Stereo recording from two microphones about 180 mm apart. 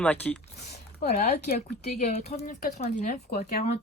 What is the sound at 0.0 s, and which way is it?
Speech, 10° left (ahead or behind).